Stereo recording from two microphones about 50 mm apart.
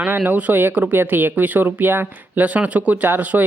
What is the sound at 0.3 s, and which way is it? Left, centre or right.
Speech, right.